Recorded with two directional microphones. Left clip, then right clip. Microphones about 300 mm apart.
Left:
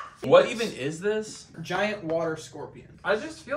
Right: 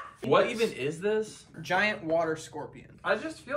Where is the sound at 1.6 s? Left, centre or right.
Centre.